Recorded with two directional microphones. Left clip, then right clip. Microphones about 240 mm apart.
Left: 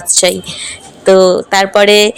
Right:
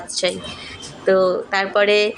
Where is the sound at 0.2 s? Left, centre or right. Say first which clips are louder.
Left 9 dB; left.